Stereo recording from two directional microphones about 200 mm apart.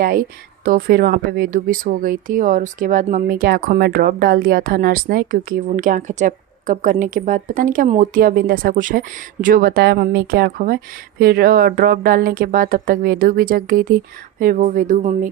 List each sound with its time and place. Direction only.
0.0 s a woman's voice: 45° right (ahead or behind)